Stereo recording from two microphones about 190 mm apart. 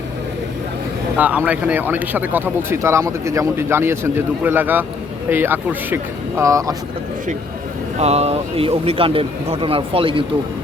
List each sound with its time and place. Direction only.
1.1 s speech: 5° right (ahead or behind)
7.9 s a man's voice: 35° right (ahead or behind)